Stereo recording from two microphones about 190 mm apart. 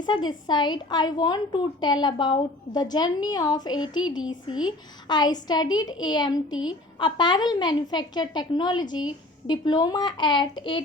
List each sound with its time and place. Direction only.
0.0 s a woman's voice: 20° left (ahead or behind)